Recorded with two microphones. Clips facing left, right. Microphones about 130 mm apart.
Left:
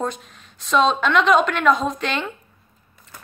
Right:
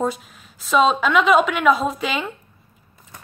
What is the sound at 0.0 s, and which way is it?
A woman's voice, 5° right (ahead or behind).